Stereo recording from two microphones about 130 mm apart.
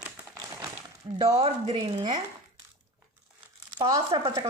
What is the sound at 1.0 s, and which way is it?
Speech, 35° right (ahead or behind).